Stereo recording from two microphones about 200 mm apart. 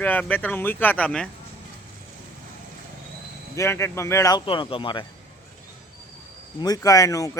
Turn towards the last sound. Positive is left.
turn(degrees=15)  # may be behind; listen again after turning